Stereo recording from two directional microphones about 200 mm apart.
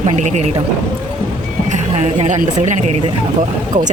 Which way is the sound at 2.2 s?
35° right (ahead or behind).